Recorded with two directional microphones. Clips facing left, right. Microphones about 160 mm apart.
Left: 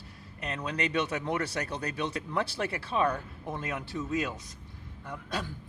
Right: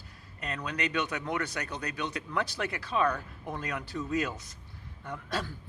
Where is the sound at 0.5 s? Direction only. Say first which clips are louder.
Left 2 dB; 30° left (ahead or behind).